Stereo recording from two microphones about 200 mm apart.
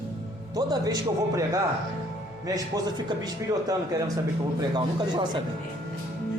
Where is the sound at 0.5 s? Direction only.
20° right (ahead or behind).